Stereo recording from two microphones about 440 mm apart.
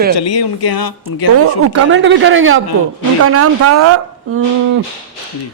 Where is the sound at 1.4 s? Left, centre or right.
Right.